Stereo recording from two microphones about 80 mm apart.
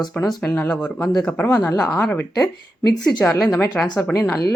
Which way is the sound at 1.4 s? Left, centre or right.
Left.